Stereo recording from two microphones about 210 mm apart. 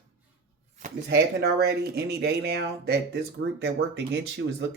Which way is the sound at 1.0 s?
50° right (ahead or behind).